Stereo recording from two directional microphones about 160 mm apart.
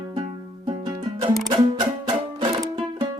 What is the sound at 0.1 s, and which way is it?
Music, 30° right (ahead or behind).